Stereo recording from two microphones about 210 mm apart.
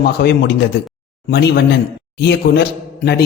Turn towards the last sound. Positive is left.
turn(degrees=55)  # may be behind; listen again after turning